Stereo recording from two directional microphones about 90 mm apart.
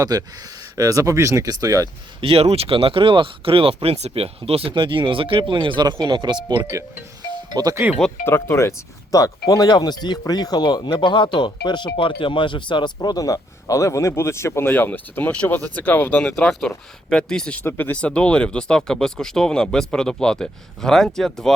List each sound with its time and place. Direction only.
0.0 s speech: 45° right (ahead or behind)
2.2 s speech: 90° right; by 6.6 s 60° right (ahead or behind)
6.6 s speech: 30° right (ahead or behind)
7.5 s speech: 45° right (ahead or behind)
8.2 s speech: 25° left (ahead or behind)
9.1 s speech: 40° left (ahead or behind)
14.7 s speech: 20° left (ahead or behind)
17.6 s speech: 25° left (ahead or behind); by 21.5 s 5° left (ahead or behind)